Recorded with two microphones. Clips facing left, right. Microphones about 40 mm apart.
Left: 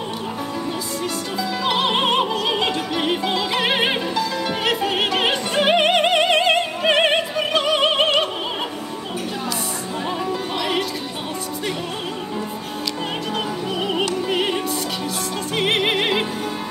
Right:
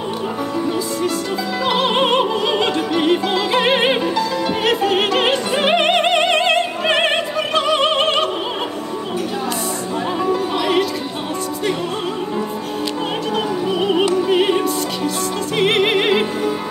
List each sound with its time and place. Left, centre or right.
1.7 s music: centre
10.2 s music: centre
13.7 s music: centre
14.1 s opera: centre
15.5 s music: centre